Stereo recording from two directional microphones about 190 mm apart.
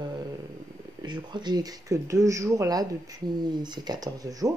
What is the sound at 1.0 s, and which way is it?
Speech, 25° right (ahead or behind).